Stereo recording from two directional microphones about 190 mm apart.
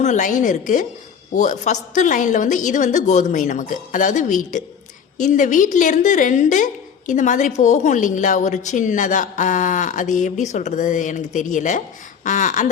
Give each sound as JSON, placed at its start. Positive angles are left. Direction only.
{"t": 0.0, "sound": "a woman's voice", "side_deg": 40}